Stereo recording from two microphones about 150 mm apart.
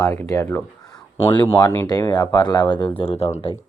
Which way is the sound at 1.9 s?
25° left (ahead or behind).